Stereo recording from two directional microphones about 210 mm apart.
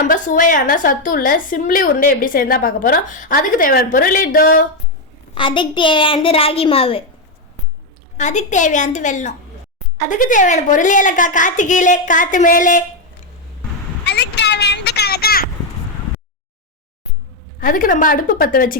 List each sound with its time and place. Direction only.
0.0 s a woman's voice: 40° left (ahead or behind)
5.3 s a woman's voice: 25° left (ahead or behind)
8.2 s a woman's voice: 35° left (ahead or behind)
14.0 s vehicle: 55° left (ahead or behind)
17.6 s a woman's voice: 40° left (ahead or behind)